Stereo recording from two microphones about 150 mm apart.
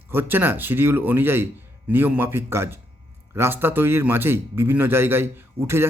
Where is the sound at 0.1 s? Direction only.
15° right (ahead or behind).